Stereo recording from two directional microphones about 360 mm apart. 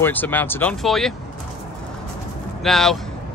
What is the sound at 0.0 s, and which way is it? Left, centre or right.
Speech, centre.